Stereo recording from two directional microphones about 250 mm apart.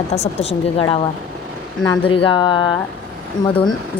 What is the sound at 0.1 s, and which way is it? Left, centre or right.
Speech, left.